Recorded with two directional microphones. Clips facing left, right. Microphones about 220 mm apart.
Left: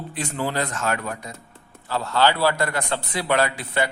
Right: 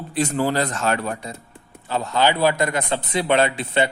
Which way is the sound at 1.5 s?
15° right (ahead or behind).